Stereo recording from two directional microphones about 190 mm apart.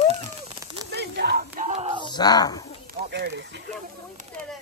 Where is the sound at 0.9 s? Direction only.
60° right (ahead or behind).